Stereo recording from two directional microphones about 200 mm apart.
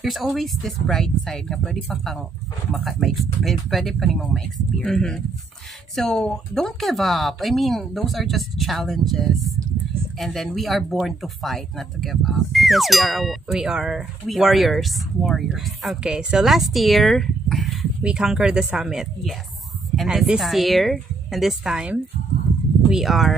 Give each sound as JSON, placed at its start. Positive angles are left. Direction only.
{"t": 0.0, "sound": "speech", "side_deg": 0}